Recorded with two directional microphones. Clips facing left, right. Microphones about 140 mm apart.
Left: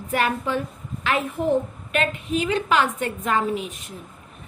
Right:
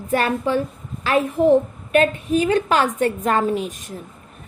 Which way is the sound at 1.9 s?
40° right (ahead or behind).